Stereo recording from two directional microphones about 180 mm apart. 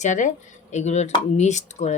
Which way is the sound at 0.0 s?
45° left (ahead or behind).